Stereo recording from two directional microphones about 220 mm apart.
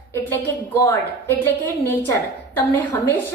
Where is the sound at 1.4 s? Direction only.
10° left (ahead or behind).